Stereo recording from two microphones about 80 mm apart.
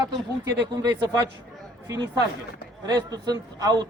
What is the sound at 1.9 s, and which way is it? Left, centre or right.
A man's voice, right.